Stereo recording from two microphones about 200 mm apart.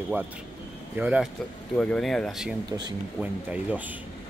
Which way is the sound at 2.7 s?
20° right (ahead or behind).